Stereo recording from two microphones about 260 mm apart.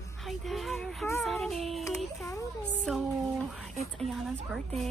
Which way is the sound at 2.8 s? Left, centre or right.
Centre.